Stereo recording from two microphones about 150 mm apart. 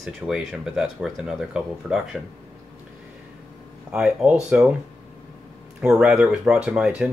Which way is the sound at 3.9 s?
5° right (ahead or behind).